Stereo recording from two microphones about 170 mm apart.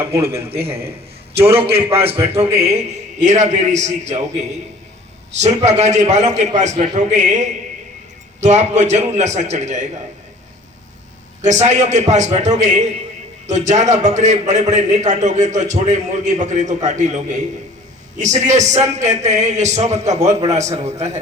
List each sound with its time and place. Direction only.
0.0 s speech: 15° right (ahead or behind)
1.5 s speech: 10° right (ahead or behind)
2.5 s a man's voice: 35° right (ahead or behind)
11.4 s a man's voice: 45° right (ahead or behind)